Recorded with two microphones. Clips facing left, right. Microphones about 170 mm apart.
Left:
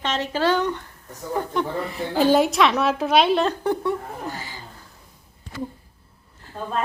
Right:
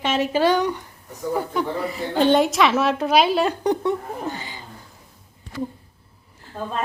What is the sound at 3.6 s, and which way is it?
Speech, 20° right (ahead or behind).